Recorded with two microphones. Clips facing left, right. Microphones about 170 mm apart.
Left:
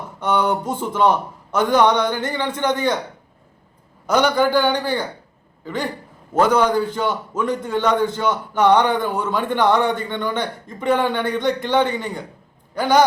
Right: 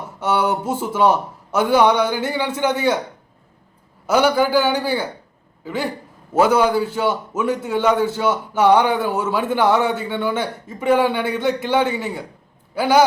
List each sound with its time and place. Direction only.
0.2 s a man's voice: 5° right (ahead or behind)
4.0 s a man's voice: 5° right (ahead or behind)